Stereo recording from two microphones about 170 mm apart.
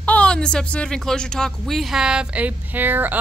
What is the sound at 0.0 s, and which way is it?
Speech, 5° left (ahead or behind).